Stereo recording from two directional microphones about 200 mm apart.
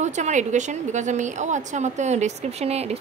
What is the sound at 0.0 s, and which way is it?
A woman's voice, 35° right (ahead or behind).